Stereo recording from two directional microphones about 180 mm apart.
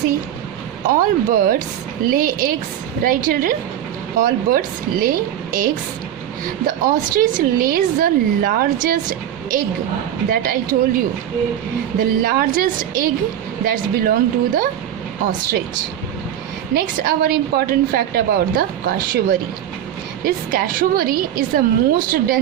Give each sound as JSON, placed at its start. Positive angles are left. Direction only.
{"t": 0.9, "sound": "a woman's voice", "side_deg": -50}
{"t": 16.7, "sound": "a woman's voice", "side_deg": -55}